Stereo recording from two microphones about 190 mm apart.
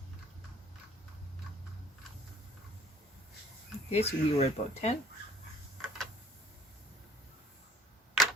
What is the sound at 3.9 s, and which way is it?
Speech, 35° left (ahead or behind).